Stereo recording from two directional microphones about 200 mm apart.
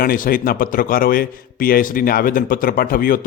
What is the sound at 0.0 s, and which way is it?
A man's voice, 45° left (ahead or behind).